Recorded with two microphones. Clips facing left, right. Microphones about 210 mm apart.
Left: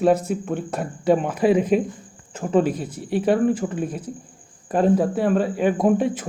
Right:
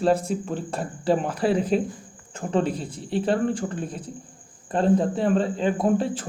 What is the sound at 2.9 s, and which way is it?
Speech, 25° right (ahead or behind).